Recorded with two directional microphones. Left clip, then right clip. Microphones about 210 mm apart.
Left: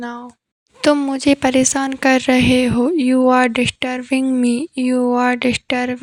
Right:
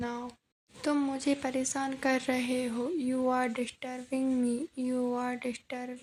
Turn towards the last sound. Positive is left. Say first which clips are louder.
# left 19 dB
turn(degrees=40)  # may be behind; listen again after turning